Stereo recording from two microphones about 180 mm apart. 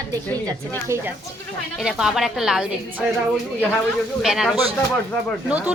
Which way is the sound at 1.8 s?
5° right (ahead or behind).